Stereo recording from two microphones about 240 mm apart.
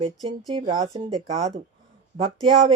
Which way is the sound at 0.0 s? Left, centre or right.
Centre.